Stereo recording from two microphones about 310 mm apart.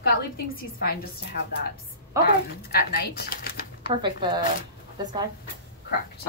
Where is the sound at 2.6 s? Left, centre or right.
Left.